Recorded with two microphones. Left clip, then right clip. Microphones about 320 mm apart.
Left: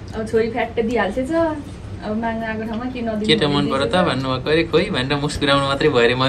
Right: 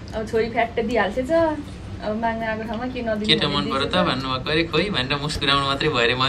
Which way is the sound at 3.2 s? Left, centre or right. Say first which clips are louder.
Left 4 dB; centre.